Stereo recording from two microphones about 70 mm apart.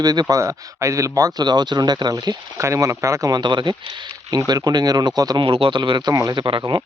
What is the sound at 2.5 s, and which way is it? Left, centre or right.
Speech, right.